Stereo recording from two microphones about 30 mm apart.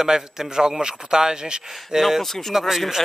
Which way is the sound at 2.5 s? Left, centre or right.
Centre.